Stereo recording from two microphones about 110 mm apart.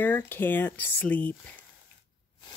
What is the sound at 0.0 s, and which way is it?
Speech, 20° left (ahead or behind).